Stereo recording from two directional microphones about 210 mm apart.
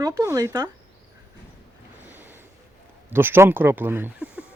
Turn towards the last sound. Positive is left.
turn(degrees=-10)  # may be behind; listen again after turning